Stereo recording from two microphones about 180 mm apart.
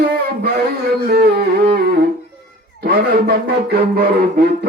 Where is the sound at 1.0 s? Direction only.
60° right (ahead or behind).